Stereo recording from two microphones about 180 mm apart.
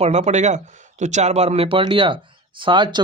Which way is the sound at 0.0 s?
40° right (ahead or behind).